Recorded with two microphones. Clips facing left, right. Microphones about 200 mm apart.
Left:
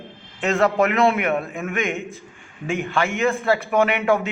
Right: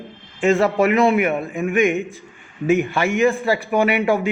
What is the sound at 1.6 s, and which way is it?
A man's voice, 15° right (ahead or behind).